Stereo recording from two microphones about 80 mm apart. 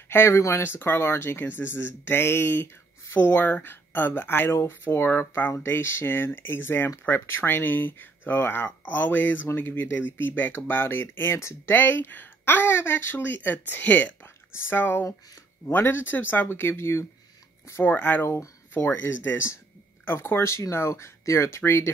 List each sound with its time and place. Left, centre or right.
0.1 s speech: left